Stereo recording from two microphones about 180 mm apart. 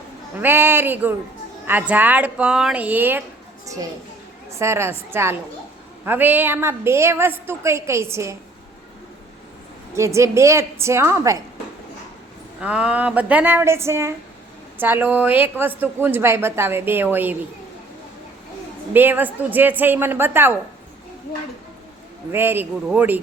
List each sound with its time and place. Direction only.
0.3 s a woman's voice: 10° right (ahead or behind)
4.6 s a woman's voice: 15° right (ahead or behind)
9.9 s a woman's voice: 15° right (ahead or behind)
12.5 s a woman's voice: 5° right (ahead or behind)
18.9 s a woman's voice: 10° right (ahead or behind)
22.3 s a woman's voice: 10° right (ahead or behind)